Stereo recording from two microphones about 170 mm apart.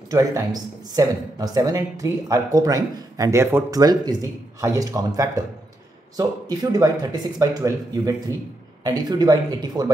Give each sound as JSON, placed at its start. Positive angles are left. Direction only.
{"t": 0.1, "sound": "speech", "side_deg": -20}